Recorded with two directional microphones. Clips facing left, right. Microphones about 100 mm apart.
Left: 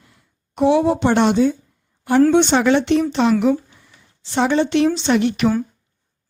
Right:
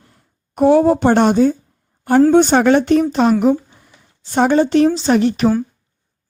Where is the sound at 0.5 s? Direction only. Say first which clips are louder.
Right 4 dB; 45° right (ahead or behind).